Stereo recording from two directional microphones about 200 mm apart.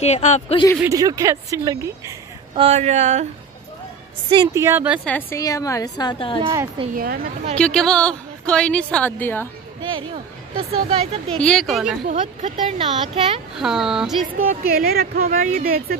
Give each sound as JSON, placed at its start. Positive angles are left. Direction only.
{"t": 0.0, "sound": "speech", "side_deg": 35}
{"t": 0.7, "sound": "a woman's voice", "side_deg": -15}
{"t": 2.6, "sound": "speech", "side_deg": -35}
{"t": 4.3, "sound": "a woman's voice", "side_deg": -20}
{"t": 5.0, "sound": "a woman's voice", "side_deg": 10}
{"t": 6.8, "sound": "speech", "side_deg": -25}
{"t": 7.5, "sound": "a woman's voice", "side_deg": 5}
{"t": 9.8, "sound": "speech", "side_deg": -25}
{"t": 11.3, "sound": "a woman's voice", "side_deg": 5}
{"t": 12.1, "sound": "speech", "side_deg": -35}
{"t": 13.6, "sound": "a woman's voice", "side_deg": 0}
{"t": 14.5, "sound": "speech", "side_deg": -50}
{"t": 15.2, "sound": "speech", "side_deg": -40}